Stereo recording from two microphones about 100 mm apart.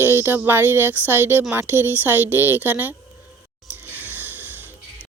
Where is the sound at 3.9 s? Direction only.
20° right (ahead or behind).